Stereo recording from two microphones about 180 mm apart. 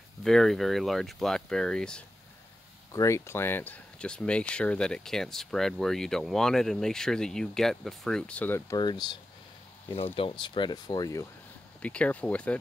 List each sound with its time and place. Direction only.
0.2 s speech: centre (ahead or behind)
2.9 s speech: 15° left (ahead or behind)
11.8 s speech: 5° left (ahead or behind)